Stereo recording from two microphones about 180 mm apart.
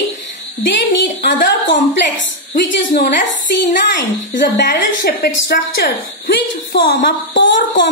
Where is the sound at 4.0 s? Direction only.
75° left (ahead or behind).